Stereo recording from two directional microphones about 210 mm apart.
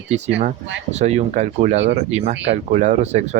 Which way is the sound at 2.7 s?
35° right (ahead or behind).